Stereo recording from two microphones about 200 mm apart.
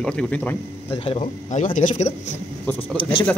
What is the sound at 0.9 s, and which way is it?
Speech, 30° left (ahead or behind).